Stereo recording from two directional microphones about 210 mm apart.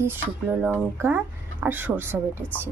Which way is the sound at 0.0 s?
5° right (ahead or behind).